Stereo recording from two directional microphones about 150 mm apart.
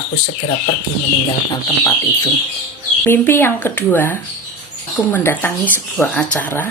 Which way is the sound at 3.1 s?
15° left (ahead or behind).